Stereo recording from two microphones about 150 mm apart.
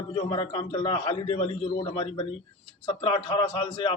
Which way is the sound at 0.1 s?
35° left (ahead or behind).